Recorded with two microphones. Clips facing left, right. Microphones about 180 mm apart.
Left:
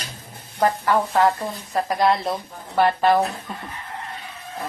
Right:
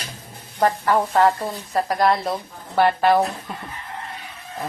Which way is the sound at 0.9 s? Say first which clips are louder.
Right 2 dB; 10° right (ahead or behind).